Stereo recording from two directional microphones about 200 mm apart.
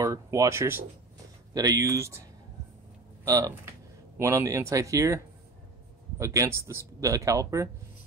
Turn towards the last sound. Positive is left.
turn(degrees=-15)  # may be behind; listen again after turning